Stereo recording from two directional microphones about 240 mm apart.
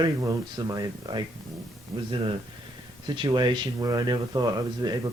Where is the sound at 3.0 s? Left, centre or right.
Centre.